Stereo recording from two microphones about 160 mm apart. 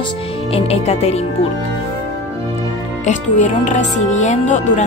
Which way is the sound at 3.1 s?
50° left (ahead or behind).